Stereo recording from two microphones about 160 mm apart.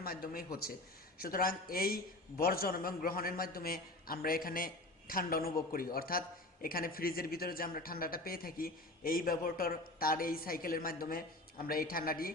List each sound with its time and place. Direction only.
0.0 s a man's voice: 65° left (ahead or behind)